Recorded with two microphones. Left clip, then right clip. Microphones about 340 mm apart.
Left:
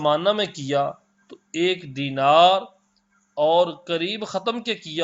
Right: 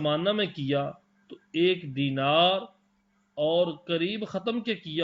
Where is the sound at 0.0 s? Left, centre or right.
Centre.